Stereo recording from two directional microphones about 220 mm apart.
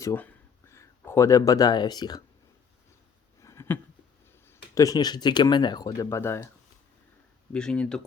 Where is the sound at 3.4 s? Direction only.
10° left (ahead or behind).